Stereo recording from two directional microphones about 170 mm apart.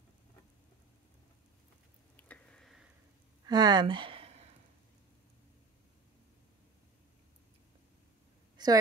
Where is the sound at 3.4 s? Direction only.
25° right (ahead or behind).